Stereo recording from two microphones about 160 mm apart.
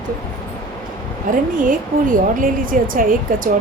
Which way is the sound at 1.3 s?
60° right (ahead or behind).